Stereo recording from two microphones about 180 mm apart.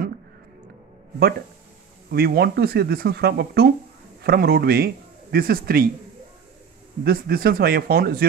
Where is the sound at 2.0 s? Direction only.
60° right (ahead or behind).